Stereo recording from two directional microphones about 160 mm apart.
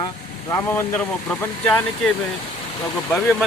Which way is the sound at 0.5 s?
15° left (ahead or behind).